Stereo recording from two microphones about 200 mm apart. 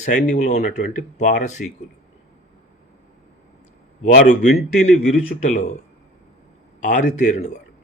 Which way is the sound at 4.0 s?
40° left (ahead or behind).